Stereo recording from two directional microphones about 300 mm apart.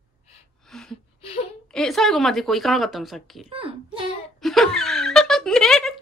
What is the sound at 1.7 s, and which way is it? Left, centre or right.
Speech, centre.